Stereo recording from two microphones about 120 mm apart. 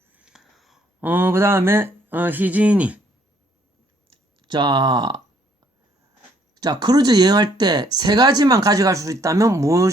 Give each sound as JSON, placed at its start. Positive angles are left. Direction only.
{"t": 0.1, "sound": "a sound", "side_deg": -10}
{"t": 1.0, "sound": "speech", "side_deg": -15}
{"t": 4.4, "sound": "speech", "side_deg": -40}
{"t": 6.5, "sound": "speech", "side_deg": -35}